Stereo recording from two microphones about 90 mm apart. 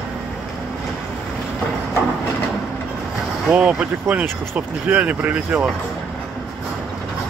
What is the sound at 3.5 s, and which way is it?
Speech, 15° right (ahead or behind).